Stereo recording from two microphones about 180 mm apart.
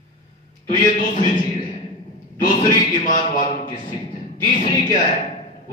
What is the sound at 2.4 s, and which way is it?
Speech, 45° left (ahead or behind).